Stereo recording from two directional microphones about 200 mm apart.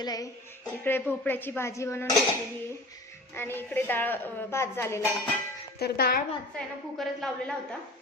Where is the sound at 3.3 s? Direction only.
10° left (ahead or behind).